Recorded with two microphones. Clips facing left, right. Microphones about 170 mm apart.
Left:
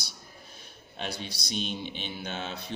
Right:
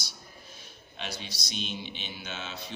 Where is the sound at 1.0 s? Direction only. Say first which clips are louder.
Left 3 dB; 55° left (ahead or behind).